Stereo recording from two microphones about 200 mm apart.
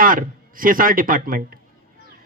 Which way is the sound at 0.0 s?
45° right (ahead or behind).